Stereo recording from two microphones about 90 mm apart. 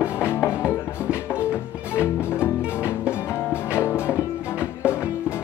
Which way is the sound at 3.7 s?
25° left (ahead or behind).